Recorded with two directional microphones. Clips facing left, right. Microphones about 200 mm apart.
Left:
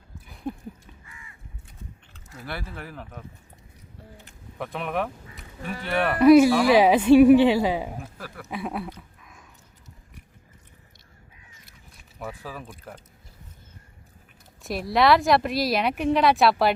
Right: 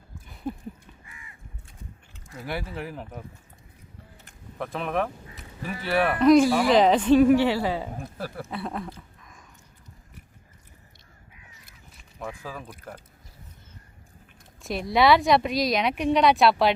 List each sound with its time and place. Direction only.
0.4 s a sound: 5° right (ahead or behind)
2.4 s speech: 15° right (ahead or behind)
4.5 s speech: centre (ahead or behind)
6.1 s a woman's voice: 10° left (ahead or behind)
8.0 s speech: 35° right (ahead or behind)
8.4 s a woman's voice: 10° left (ahead or behind)
9.0 s a sound: 5° left (ahead or behind)
12.2 s speech: 5° left (ahead or behind)
14.6 s speech: centre (ahead or behind)